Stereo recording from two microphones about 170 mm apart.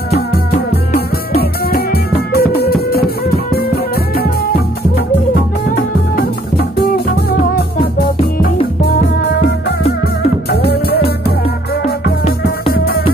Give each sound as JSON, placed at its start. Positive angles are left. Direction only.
{"t": 1.3, "sound": "music", "side_deg": 65}
{"t": 7.1, "sound": "music", "side_deg": 65}
{"t": 11.2, "sound": "music", "side_deg": 65}